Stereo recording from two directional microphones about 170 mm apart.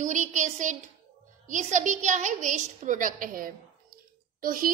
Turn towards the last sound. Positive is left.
turn(degrees=-55)  # may be behind; listen again after turning